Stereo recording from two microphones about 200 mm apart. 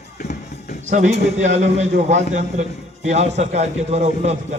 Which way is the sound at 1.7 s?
35° right (ahead or behind).